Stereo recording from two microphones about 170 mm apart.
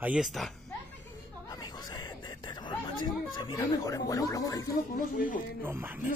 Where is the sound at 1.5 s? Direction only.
25° left (ahead or behind).